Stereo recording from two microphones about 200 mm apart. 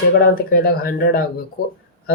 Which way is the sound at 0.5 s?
50° left (ahead or behind).